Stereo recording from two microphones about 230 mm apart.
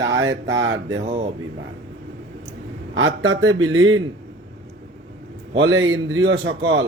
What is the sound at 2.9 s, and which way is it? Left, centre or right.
A man's voice, right.